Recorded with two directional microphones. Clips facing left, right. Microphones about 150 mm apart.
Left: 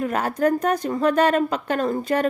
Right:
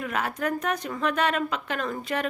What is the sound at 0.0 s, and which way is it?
A woman's voice, 40° left (ahead or behind).